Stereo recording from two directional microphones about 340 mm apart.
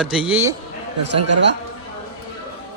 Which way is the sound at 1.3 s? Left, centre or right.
Right.